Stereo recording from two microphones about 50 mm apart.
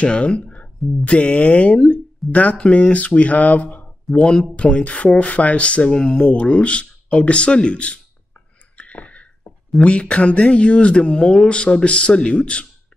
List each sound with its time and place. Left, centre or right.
0.0 s speech: left
4.1 s speech: centre
8.7 s a sound: left
9.8 s speech: left